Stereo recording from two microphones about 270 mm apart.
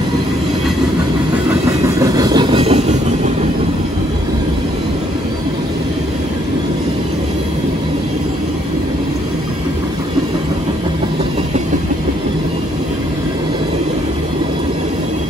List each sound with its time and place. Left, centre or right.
2.0 s train: centre